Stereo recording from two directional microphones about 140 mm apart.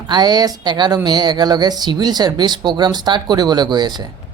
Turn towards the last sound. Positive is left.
turn(degrees=-30)  # may be behind; listen again after turning